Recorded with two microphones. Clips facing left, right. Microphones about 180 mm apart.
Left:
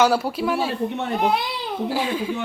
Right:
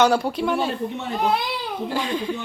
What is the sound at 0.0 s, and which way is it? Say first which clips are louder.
Speech: even; 5° left (ahead or behind).